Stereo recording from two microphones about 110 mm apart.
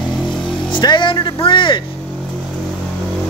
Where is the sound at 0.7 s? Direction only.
45° left (ahead or behind).